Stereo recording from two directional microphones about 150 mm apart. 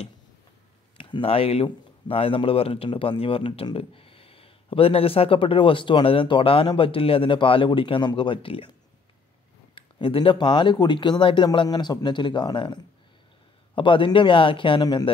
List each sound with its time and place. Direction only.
0.9 s speech: 35° left (ahead or behind)
9.8 s speech: 35° left (ahead or behind)